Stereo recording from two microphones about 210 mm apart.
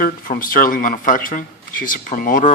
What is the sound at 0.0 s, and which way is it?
A man's voice, 40° left (ahead or behind).